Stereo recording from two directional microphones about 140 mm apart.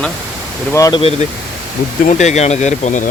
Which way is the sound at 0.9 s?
45° left (ahead or behind).